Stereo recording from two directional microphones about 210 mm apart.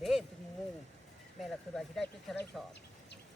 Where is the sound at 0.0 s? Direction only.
Centre (ahead or behind).